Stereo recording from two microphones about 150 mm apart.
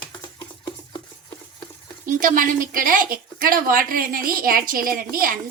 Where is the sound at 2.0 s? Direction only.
65° right (ahead or behind).